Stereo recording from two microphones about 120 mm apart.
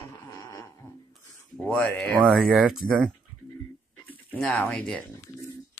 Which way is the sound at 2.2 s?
Centre (ahead or behind).